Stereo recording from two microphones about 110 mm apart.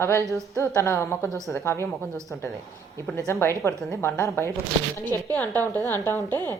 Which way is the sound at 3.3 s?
25° left (ahead or behind).